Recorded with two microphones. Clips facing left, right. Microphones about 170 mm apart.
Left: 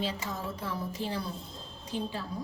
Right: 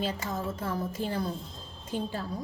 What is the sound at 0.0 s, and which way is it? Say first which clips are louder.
A woman's voice: right 2 dB; 50° right (ahead or behind).